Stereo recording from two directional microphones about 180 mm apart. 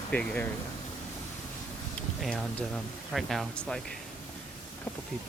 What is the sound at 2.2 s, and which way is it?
Speech, centre (ahead or behind).